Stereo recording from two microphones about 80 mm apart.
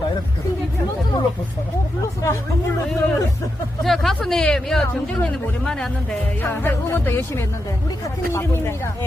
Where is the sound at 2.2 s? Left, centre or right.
Left.